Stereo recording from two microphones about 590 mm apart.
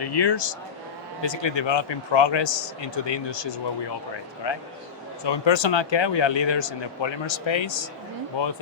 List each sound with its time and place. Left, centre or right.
0.0 s a man's voice: left